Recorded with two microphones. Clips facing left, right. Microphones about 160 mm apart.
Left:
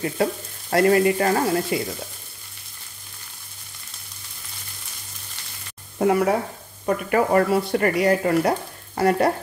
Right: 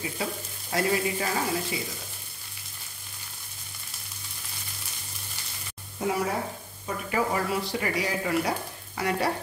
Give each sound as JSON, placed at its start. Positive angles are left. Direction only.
{"t": 0.0, "sound": "speech", "side_deg": 60}
{"t": 5.9, "sound": "speech", "side_deg": 60}